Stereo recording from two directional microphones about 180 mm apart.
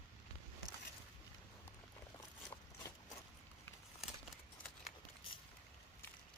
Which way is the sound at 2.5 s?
20° left (ahead or behind).